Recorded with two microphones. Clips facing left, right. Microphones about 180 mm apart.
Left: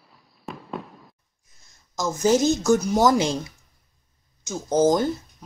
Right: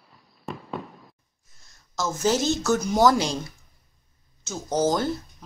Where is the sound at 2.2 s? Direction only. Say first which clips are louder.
Left 4 dB; 50° left (ahead or behind).